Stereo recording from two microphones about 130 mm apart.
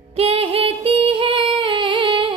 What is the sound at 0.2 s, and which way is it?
Female singing, 45° right (ahead or behind).